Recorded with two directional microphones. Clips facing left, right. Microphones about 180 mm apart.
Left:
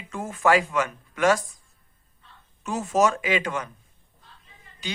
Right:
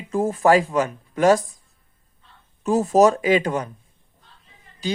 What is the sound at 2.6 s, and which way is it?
Speech, 35° right (ahead or behind).